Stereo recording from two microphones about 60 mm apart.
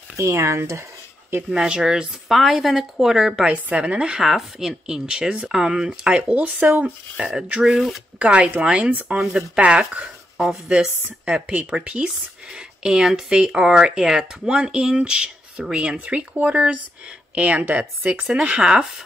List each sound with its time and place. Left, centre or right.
0.2 s speech: right
1.5 s speech: centre
3.7 s speech: centre
4.2 s speech: centre; by 6.9 s right
7.2 s speech: centre
18.3 s speech: centre